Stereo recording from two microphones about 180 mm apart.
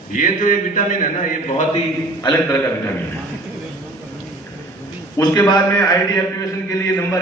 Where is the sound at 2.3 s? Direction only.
10° left (ahead or behind).